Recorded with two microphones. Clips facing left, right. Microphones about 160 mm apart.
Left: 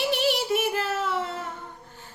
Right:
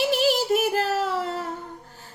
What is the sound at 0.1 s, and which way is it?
Child singing, 40° right (ahead or behind).